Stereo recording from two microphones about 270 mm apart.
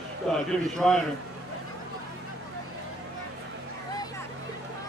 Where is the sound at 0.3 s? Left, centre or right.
Centre.